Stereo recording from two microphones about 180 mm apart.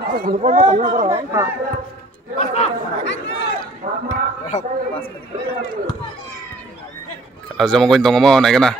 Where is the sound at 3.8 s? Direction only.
50° right (ahead or behind).